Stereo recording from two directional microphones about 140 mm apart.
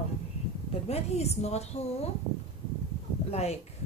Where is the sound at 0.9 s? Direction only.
50° left (ahead or behind).